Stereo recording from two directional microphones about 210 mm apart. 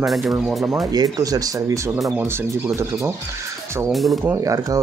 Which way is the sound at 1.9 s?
Centre (ahead or behind).